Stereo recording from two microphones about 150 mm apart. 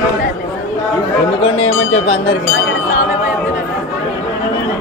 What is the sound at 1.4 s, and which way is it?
Speech, 40° left (ahead or behind).